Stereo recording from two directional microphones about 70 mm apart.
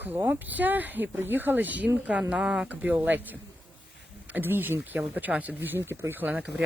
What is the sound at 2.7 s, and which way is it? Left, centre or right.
Speech, right.